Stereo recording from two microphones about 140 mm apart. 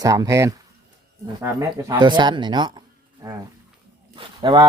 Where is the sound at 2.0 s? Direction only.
30° right (ahead or behind).